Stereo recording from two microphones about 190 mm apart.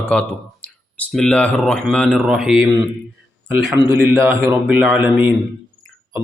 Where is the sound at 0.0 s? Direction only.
5° left (ahead or behind).